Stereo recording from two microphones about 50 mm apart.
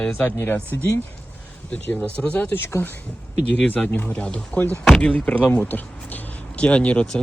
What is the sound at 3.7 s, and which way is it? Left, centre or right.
Speech, left.